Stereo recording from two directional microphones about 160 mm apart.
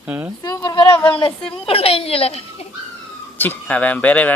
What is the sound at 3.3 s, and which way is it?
Speech, 10° left (ahead or behind).